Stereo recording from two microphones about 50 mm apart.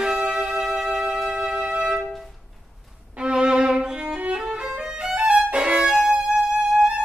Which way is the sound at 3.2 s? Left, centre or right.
Centre.